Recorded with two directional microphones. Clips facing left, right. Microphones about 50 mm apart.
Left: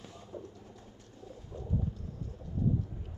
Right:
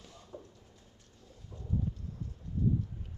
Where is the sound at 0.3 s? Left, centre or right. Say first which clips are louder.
Left 4 dB; left.